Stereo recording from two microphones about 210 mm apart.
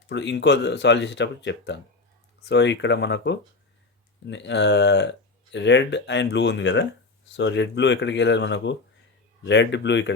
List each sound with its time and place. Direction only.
0.1 s speech: 55° left (ahead or behind)